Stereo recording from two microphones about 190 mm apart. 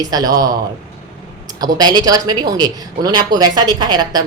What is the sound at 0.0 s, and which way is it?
Speech, 20° right (ahead or behind).